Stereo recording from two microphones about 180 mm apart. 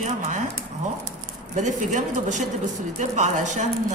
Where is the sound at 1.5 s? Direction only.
40° right (ahead or behind).